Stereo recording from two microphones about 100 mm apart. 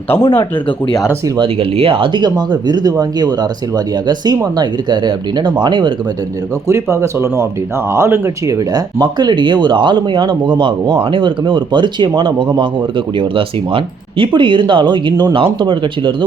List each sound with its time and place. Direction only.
1.4 s speech: 65° right (ahead or behind); by 5.9 s 50° right (ahead or behind)
6.7 s speech: 30° right (ahead or behind)
8.7 s speech: 40° right (ahead or behind)
13.1 s speech: 60° right (ahead or behind)